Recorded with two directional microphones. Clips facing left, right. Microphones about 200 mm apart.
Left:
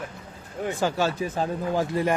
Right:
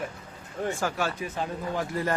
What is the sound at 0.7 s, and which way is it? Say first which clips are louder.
Speech: left 6 dB; 25° left (ahead or behind).